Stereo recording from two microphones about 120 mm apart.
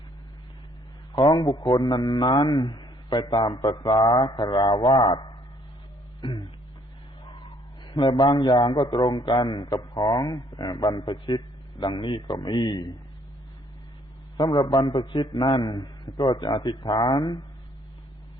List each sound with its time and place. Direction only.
1.1 s a man's voice: 40° left (ahead or behind)
7.3 s a sound: 40° left (ahead or behind)
8.2 s a man's voice: 35° left (ahead or behind)
14.3 s a man's voice: 35° left (ahead or behind)